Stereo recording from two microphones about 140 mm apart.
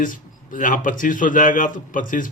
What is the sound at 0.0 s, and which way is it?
Speech, 70° left (ahead or behind).